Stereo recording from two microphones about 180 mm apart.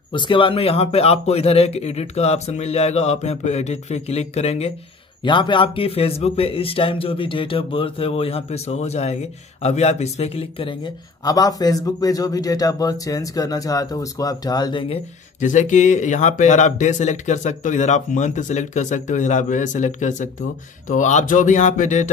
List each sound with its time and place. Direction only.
0.1 s a man's voice: 25° left (ahead or behind)
5.2 s a man's voice: 25° left (ahead or behind)
15.4 s speech: 45° left (ahead or behind)